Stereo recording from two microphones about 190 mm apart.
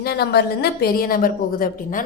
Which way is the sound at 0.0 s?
55° left (ahead or behind).